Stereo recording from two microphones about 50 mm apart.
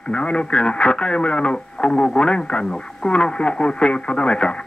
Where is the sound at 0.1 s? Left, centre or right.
Left.